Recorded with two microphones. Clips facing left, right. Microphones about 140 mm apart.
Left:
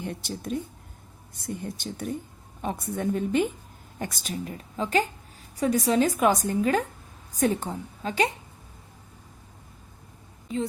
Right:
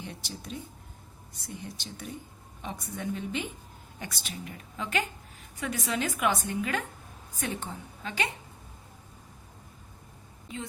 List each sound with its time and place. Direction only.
0.0 s a woman's voice: 50° left (ahead or behind)